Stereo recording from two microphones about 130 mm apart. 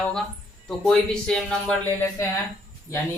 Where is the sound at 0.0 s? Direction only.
5° left (ahead or behind).